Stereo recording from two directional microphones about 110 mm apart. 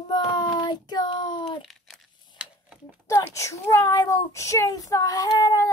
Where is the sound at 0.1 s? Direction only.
40° left (ahead or behind).